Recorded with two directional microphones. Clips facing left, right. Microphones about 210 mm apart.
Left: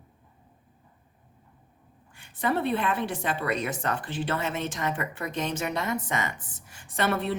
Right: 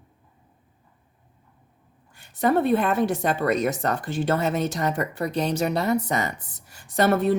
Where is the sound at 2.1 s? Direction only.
40° right (ahead or behind).